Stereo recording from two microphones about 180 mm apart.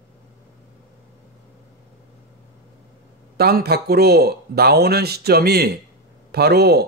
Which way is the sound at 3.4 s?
60° right (ahead or behind).